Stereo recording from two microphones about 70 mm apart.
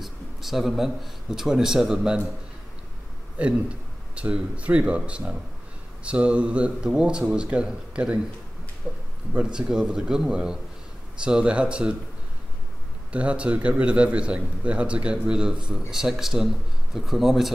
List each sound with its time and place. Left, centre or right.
0.0 s speech: centre
3.3 s a man's voice: centre
13.1 s a man's voice: centre